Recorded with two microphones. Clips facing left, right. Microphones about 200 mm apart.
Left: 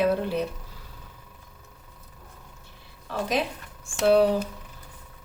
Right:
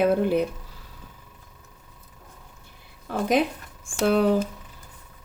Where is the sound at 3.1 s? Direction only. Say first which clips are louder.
Right 5 dB; 50° right (ahead or behind).